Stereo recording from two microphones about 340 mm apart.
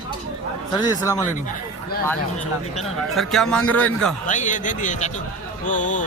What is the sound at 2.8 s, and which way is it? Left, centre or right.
Speech, centre.